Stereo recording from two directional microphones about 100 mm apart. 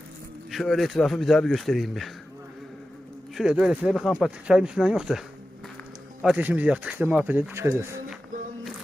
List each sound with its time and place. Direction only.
0.5 s a man's voice: centre (ahead or behind)
3.3 s speech: 10° right (ahead or behind)
6.3 s speech: 15° right (ahead or behind)